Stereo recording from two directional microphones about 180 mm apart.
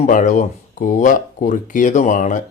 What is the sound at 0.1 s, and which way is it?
Speech, 45° left (ahead or behind).